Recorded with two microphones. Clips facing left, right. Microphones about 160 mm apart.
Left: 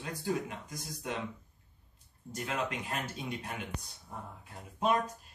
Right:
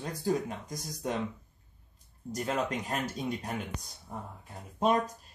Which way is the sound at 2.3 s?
40° right (ahead or behind).